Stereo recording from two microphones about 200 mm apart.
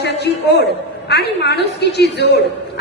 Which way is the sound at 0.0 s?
55° left (ahead or behind).